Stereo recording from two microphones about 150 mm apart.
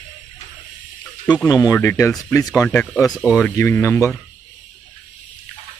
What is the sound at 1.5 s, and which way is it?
Speech, 15° left (ahead or behind).